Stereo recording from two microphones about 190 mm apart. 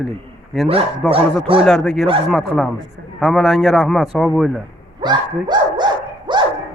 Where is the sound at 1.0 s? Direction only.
5° left (ahead or behind).